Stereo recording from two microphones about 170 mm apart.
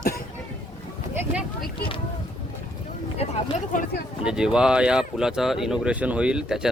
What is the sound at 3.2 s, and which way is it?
Speech, 35° left (ahead or behind).